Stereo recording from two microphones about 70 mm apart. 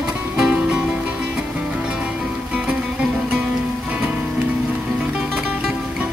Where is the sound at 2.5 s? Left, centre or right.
Centre.